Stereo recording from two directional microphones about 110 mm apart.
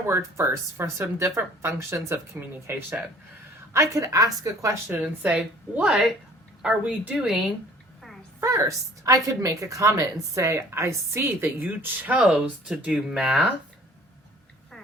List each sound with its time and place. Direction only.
0.1 s a woman's voice: 25° right (ahead or behind)
4.9 s a woman's voice: 10° right (ahead or behind)
8.4 s a woman's voice: 25° right (ahead or behind); by 13.5 s 5° right (ahead or behind)